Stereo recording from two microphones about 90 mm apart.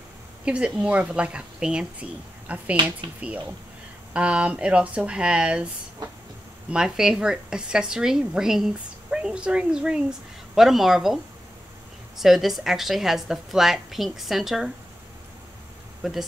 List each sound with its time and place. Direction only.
0.5 s a woman's voice: 10° right (ahead or behind)
2.7 s speech: 60° right (ahead or behind)
3.2 s a woman's voice: 15° right (ahead or behind)
6.7 s a woman's voice: 5° right (ahead or behind)
12.2 s a woman's voice: centre (ahead or behind)
16.0 s speech: 5° right (ahead or behind)